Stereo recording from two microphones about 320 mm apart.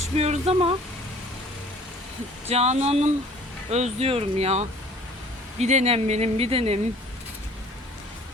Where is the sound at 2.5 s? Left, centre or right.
Right.